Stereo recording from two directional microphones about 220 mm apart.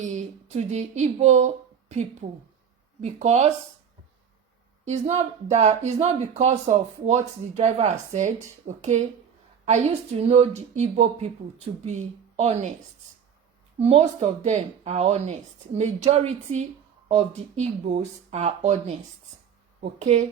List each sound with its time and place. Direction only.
0.0 s speech: 30° right (ahead or behind)
3.0 s speech: 30° right (ahead or behind)
4.9 s speech: 30° right (ahead or behind)
13.7 s speech: 30° right (ahead or behind)